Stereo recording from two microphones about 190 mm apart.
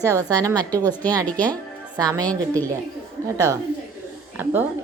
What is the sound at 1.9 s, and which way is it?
Speech, 20° right (ahead or behind).